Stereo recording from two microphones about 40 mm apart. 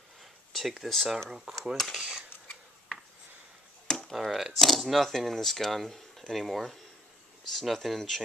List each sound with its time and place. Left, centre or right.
0.5 s a sound: centre
0.8 s speech: centre
1.1 s speech: centre
1.6 s speech: centre
2.0 s speech: right
4.1 s speech: centre
4.6 s speech: centre